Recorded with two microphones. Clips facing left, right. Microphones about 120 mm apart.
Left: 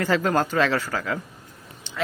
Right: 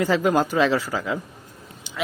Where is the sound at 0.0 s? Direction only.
15° right (ahead or behind).